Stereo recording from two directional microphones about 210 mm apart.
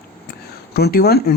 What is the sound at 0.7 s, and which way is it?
Speech, 50° left (ahead or behind).